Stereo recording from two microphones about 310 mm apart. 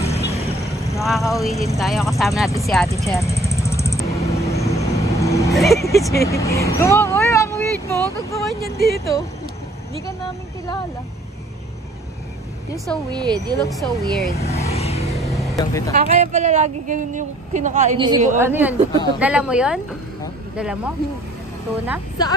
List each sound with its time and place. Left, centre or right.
0.0 s vehicle: centre
1.1 s speech: centre
2.9 s vehicle: centre
5.9 s speech: centre
6.2 s vehicle: centre
8.2 s speech: centre
8.6 s speech: left
13.1 s speech: centre
13.6 s speech: centre
14.2 s vehicle: left
15.1 s vehicle: centre
15.5 s speech: centre
15.9 s a woman's voice: right; by 20.9 s centre